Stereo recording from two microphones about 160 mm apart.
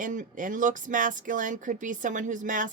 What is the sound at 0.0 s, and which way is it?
Speech, 55° right (ahead or behind).